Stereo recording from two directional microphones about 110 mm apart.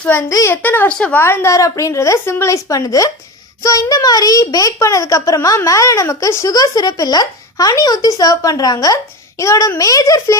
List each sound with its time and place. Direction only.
0.0 s a woman's voice: 20° left (ahead or behind)
1.2 s a woman's voice: 20° left (ahead or behind)